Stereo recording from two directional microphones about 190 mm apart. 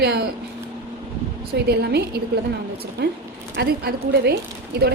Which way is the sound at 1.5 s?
60° right (ahead or behind).